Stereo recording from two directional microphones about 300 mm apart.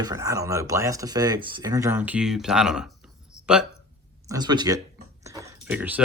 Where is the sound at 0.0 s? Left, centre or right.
Centre.